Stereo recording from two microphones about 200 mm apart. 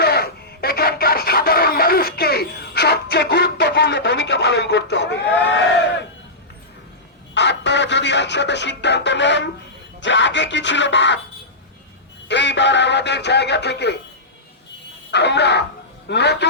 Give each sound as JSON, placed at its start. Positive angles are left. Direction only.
{"t": 0.0, "sound": "a sound", "side_deg": 50}
{"t": 7.3, "sound": "music", "side_deg": 60}
{"t": 10.0, "sound": "speech", "side_deg": 65}
{"t": 12.3, "sound": "speech", "side_deg": 60}
{"t": 15.1, "sound": "speech", "side_deg": 60}